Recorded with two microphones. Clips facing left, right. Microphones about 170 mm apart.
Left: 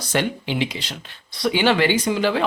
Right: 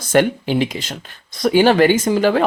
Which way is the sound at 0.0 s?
50° right (ahead or behind).